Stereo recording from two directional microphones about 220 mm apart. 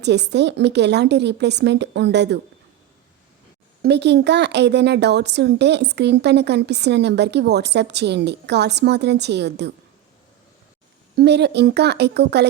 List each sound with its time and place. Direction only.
0.0 s speech: 50° right (ahead or behind)
3.8 s speech: 50° right (ahead or behind)
11.2 s speech: 50° right (ahead or behind)